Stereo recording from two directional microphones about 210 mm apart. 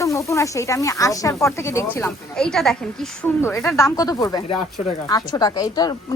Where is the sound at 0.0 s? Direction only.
15° left (ahead or behind).